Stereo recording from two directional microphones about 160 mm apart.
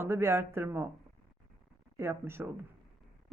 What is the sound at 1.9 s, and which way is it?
Speech, 15° right (ahead or behind).